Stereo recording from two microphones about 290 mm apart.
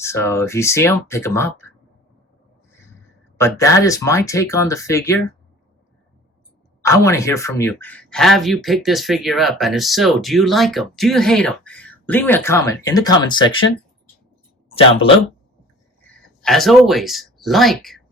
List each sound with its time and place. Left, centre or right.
0.0 s speech: centre
3.3 s speech: centre
6.8 s speech: centre
14.7 s speech: centre
16.0 s speech: centre